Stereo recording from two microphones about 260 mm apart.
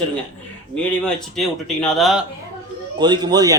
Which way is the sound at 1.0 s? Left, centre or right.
Centre.